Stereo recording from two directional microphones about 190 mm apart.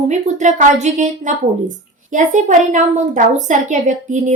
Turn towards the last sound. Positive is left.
turn(degrees=-40)  # may be behind; listen again after turning